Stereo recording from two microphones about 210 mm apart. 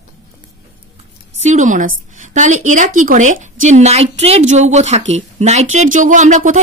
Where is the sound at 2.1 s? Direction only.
35° right (ahead or behind).